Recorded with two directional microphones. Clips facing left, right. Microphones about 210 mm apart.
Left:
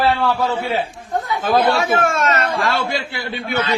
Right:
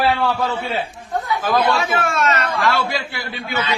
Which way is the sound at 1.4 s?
30° left (ahead or behind).